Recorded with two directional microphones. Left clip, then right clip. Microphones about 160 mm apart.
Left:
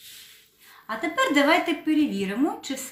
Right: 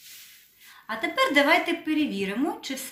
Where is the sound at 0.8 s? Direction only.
10° right (ahead or behind).